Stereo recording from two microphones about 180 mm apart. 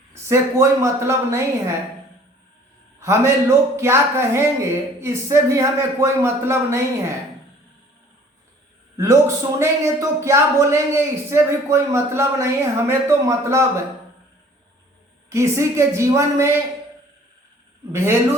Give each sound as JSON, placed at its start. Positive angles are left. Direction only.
{"t": 0.3, "sound": "speech", "side_deg": -15}
{"t": 3.0, "sound": "speech", "side_deg": -15}
{"t": 9.0, "sound": "speech", "side_deg": -15}
{"t": 15.3, "sound": "speech", "side_deg": -15}
{"t": 17.9, "sound": "speech", "side_deg": -15}